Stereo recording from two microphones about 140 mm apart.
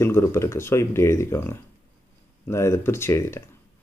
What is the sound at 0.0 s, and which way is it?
Speech, 20° left (ahead or behind).